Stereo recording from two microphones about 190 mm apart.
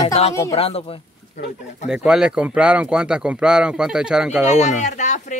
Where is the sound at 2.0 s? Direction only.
5° right (ahead or behind).